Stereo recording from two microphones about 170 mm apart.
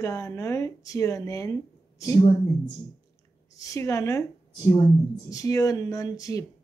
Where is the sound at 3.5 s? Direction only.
20° left (ahead or behind).